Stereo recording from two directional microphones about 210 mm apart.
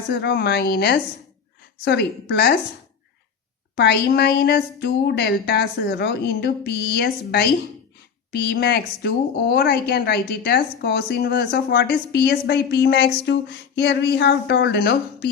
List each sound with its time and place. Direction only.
0.1 s a woman's voice: 50° left (ahead or behind)
3.8 s a woman's voice: 50° left (ahead or behind)